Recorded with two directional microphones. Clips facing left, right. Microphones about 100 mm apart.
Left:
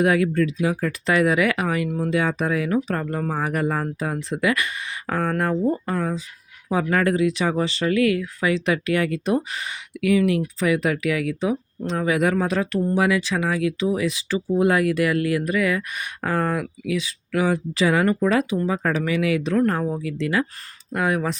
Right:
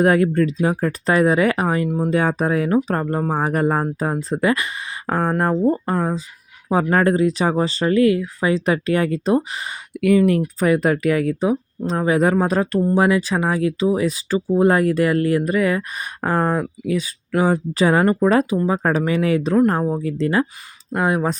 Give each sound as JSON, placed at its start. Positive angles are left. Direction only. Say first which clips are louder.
{"t": 0.0, "sound": "speech", "louder": "right 3 dB", "side_deg": -45}
{"t": 10.0, "sound": "speech", "louder": "right 4 dB", "side_deg": -45}
{"t": 19.5, "sound": "speech", "louder": "right 4 dB", "side_deg": -25}